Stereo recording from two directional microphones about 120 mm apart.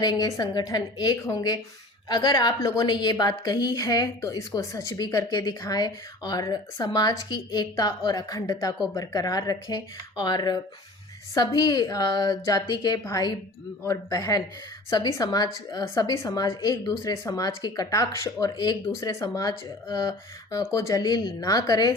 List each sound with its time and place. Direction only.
0.0 s a woman's voice: 30° left (ahead or behind)